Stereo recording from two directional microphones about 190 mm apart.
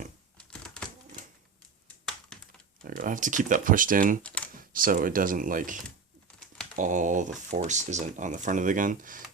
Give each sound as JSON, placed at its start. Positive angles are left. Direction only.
{"t": 2.8, "sound": "speech", "side_deg": -45}
{"t": 4.2, "sound": "speech", "side_deg": 5}
{"t": 4.5, "sound": "speech", "side_deg": -45}